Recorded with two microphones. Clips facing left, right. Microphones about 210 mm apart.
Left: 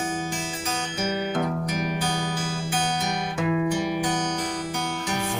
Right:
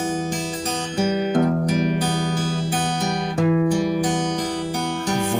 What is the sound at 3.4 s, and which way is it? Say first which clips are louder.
Music: right 6 dB; 40° right (ahead or behind).